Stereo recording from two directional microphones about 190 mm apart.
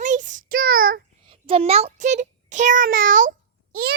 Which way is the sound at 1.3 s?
30° right (ahead or behind).